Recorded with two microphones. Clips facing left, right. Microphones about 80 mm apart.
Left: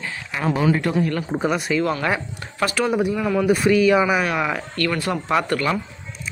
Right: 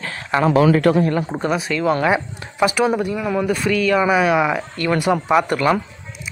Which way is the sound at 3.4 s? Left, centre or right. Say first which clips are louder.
Left 4 dB; centre.